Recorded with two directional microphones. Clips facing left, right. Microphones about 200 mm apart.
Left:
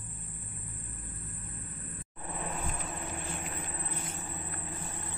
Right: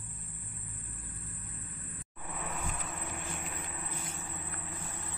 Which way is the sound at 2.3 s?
35° left (ahead or behind).